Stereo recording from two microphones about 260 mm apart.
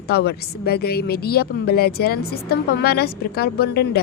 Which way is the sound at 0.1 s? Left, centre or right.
Left.